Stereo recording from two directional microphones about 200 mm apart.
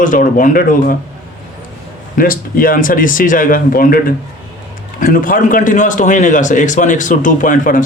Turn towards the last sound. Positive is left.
turn(degrees=40)  # may be behind; listen again after turning